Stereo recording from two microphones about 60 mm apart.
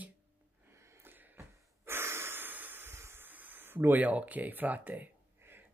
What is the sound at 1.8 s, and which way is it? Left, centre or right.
Breathing, right.